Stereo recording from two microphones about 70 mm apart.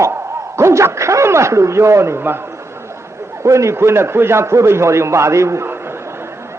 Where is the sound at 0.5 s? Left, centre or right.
Right.